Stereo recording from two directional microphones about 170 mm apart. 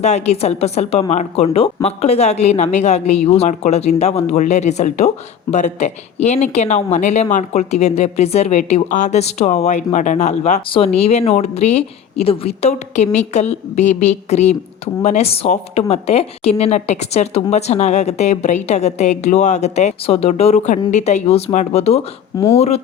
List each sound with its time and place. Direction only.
0.0 s speech: 40° left (ahead or behind)